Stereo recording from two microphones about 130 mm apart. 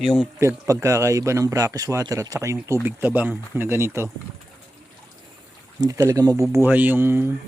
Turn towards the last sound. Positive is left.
turn(degrees=-15)  # may be behind; listen again after turning